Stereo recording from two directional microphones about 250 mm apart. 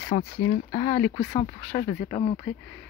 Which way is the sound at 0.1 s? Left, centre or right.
Left.